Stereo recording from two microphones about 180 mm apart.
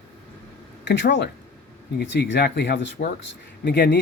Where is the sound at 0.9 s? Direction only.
80° left.